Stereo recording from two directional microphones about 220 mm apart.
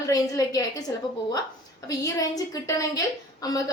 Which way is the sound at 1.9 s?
15° left (ahead or behind).